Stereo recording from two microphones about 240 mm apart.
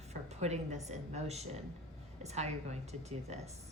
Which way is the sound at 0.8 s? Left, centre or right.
Right.